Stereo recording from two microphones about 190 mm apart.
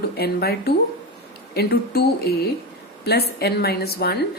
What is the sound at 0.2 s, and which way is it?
Speech, 55° left (ahead or behind).